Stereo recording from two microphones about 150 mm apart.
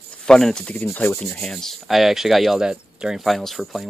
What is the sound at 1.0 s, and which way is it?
Rub, 15° left (ahead or behind).